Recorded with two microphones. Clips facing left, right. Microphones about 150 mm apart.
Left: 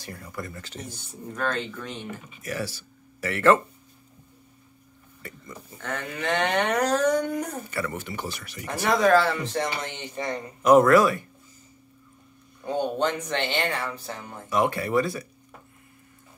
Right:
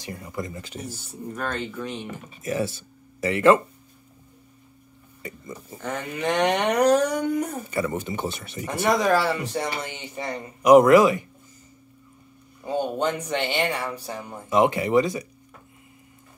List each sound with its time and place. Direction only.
0.0 s dog: 20° right (ahead or behind)
2.4 s speech: 25° right (ahead or behind)
5.2 s speech: 20° right (ahead or behind)
5.8 s dog: 10° right (ahead or behind)
8.9 s dog: 10° right (ahead or behind)
12.6 s dog: 10° right (ahead or behind)